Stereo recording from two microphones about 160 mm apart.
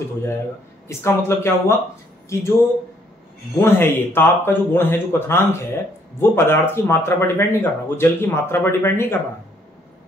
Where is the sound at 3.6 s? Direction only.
15° left (ahead or behind).